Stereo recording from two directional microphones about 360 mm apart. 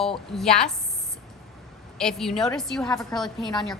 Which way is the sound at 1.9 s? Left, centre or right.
Centre.